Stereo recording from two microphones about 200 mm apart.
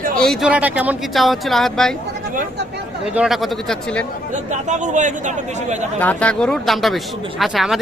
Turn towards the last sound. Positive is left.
turn(degrees=0)  # may be behind; listen again after turning